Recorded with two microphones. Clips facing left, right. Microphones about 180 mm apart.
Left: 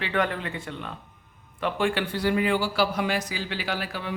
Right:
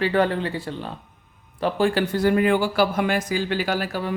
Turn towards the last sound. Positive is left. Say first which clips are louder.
# right 6 dB
turn(degrees=-40)  # may be behind; listen again after turning